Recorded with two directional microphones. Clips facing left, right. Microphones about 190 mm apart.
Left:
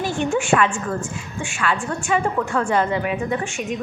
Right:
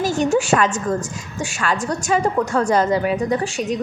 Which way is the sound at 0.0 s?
40° right (ahead or behind).